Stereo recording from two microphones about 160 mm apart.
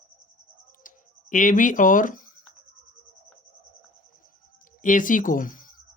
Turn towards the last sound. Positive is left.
turn(degrees=60)  # may be behind; listen again after turning